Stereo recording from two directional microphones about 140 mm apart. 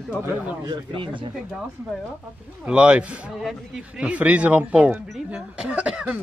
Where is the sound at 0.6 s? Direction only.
35° right (ahead or behind).